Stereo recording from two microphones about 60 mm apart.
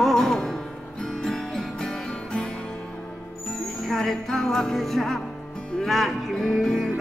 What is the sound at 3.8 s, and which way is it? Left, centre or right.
Music, centre.